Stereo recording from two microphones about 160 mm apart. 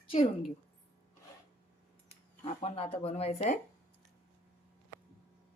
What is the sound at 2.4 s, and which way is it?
A woman's voice, 40° left (ahead or behind).